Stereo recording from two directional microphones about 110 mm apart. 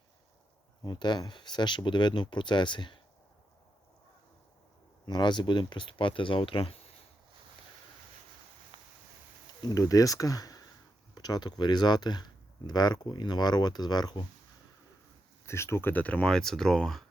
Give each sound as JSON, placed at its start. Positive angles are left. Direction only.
{"t": 0.9, "sound": "speech", "side_deg": 45}
{"t": 5.0, "sound": "speech", "side_deg": 40}
{"t": 9.6, "sound": "speech", "side_deg": 30}
{"t": 15.4, "sound": "speech", "side_deg": 25}